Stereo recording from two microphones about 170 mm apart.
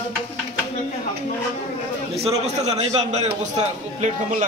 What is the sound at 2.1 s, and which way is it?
A man's voice, 40° right (ahead or behind).